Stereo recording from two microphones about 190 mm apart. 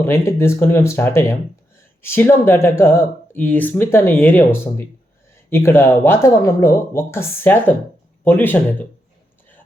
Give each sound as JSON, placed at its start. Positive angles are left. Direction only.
{"t": 0.0, "sound": "speech", "side_deg": 15}